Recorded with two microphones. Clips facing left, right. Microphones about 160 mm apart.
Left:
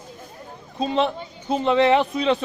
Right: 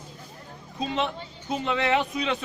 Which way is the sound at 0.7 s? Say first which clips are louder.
Left 6 dB; 35° left (ahead or behind).